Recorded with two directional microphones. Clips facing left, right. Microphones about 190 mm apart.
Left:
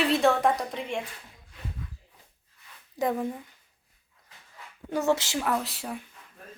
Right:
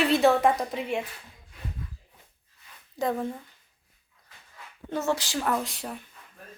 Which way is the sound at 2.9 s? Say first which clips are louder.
Even; 15° left (ahead or behind).